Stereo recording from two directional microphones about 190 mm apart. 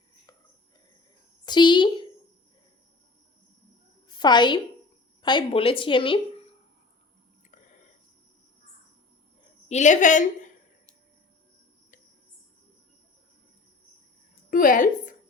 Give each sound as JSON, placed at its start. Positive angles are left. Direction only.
{"t": 1.5, "sound": "a woman's voice", "side_deg": 25}
{"t": 4.2, "sound": "a woman's voice", "side_deg": 25}
{"t": 9.6, "sound": "a woman's voice", "side_deg": 40}
{"t": 14.5, "sound": "a woman's voice", "side_deg": 45}